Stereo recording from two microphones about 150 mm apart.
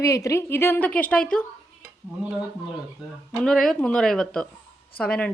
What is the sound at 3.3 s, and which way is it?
A woman's voice, 5° left (ahead or behind).